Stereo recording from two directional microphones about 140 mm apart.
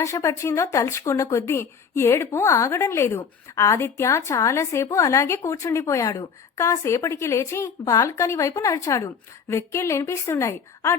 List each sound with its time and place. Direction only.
0.0 s speech: 20° left (ahead or behind)